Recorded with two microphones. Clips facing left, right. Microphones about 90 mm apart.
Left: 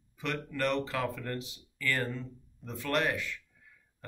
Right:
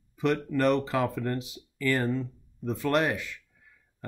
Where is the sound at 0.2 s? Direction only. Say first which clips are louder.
Right 8 dB; 20° right (ahead or behind).